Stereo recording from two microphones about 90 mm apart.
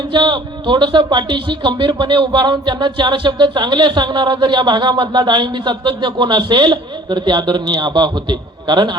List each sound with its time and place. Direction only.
0.1 s a man's voice: 60° right (ahead or behind)